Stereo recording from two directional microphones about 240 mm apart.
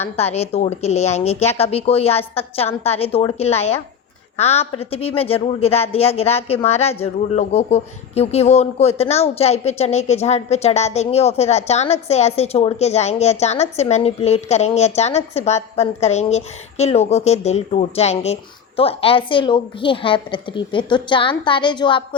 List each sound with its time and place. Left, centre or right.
0.2 s a woman's voice: left